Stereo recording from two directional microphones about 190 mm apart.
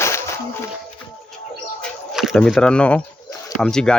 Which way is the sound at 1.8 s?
Centre (ahead or behind).